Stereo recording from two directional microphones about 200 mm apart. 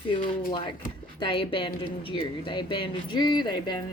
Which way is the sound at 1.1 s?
25° left (ahead or behind).